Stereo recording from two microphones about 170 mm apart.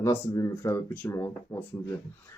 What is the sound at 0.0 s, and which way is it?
Speech, 15° left (ahead or behind).